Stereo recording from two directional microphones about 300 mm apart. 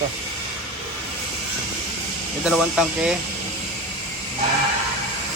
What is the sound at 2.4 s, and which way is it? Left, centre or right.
Speech, centre.